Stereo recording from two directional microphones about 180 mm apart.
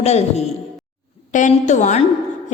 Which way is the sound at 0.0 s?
35° left (ahead or behind).